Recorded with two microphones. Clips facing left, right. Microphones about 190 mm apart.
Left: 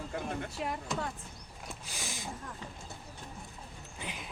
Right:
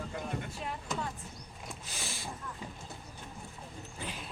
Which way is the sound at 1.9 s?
15° left (ahead or behind).